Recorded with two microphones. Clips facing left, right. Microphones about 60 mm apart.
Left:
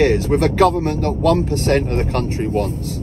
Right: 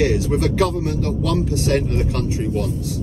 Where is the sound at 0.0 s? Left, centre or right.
Left.